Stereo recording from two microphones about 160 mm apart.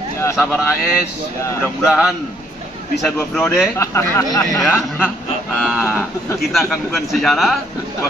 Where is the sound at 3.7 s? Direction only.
20° left (ahead or behind).